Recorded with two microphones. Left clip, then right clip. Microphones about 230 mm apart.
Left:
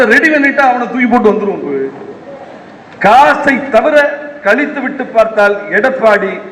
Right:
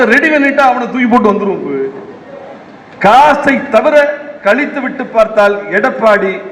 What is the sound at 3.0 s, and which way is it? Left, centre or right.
A man's voice, right.